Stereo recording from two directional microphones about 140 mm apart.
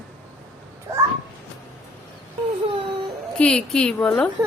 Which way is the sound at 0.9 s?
20° right (ahead or behind).